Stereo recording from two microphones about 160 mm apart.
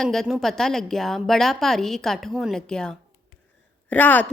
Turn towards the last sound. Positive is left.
turn(degrees=10)  # may be behind; listen again after turning